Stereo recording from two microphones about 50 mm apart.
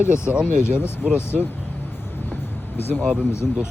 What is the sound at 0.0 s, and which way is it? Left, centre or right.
Speech, left.